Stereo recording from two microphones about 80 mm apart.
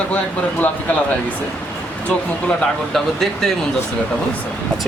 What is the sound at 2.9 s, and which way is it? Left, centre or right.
Speech, centre.